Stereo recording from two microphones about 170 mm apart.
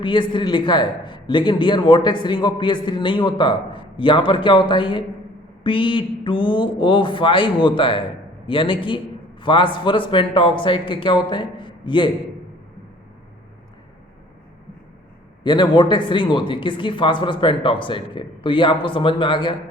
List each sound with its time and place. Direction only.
0.0 s a man's voice: 30° left (ahead or behind)
15.4 s a man's voice: 25° left (ahead or behind)